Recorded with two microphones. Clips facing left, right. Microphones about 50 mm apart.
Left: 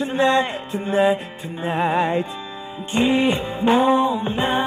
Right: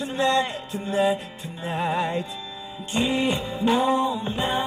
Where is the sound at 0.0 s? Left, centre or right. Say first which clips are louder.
Left 4 dB; left.